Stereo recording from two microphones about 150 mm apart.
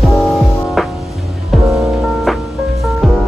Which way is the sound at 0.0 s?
Centre (ahead or behind).